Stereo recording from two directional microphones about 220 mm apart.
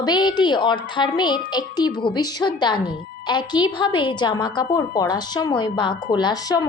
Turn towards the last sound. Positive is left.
turn(degrees=15)  # may be behind; listen again after turning